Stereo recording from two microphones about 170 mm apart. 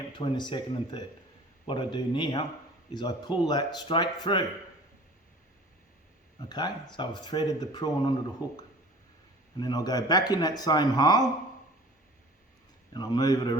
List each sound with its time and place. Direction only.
0.1 s speech: 25° left (ahead or behind)
6.5 s speech: 25° left (ahead or behind)
8.4 s speech: 10° right (ahead or behind)
9.6 s speech: 25° left (ahead or behind)
12.9 s speech: 25° left (ahead or behind)